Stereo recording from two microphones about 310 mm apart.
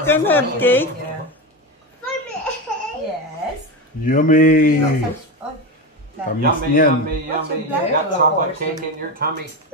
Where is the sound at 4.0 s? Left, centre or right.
Left.